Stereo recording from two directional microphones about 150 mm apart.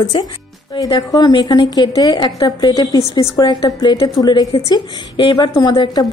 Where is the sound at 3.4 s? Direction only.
30° left (ahead or behind).